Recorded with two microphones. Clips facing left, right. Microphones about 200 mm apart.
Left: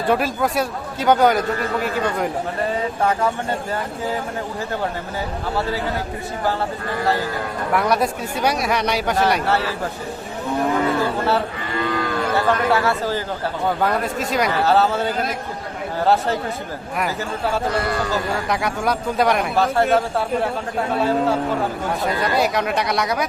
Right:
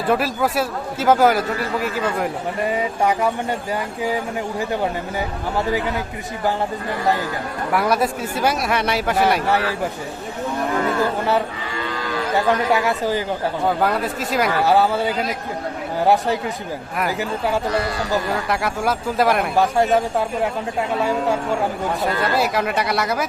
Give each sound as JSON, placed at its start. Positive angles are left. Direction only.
{"t": 0.1, "sound": "a man's voice", "side_deg": 0}
{"t": 2.6, "sound": "speech", "side_deg": -15}
{"t": 7.7, "sound": "a man's voice", "side_deg": 0}
{"t": 11.8, "sound": "moo", "side_deg": 60}
{"t": 12.3, "sound": "speech", "side_deg": -15}
{"t": 13.7, "sound": "a man's voice", "side_deg": -5}
{"t": 18.4, "sound": "a man's voice", "side_deg": 0}
{"t": 19.5, "sound": "speech", "side_deg": -15}
{"t": 22.0, "sound": "a man's voice", "side_deg": 0}